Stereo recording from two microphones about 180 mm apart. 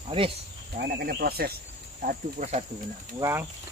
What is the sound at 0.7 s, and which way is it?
Speech, 55° right (ahead or behind).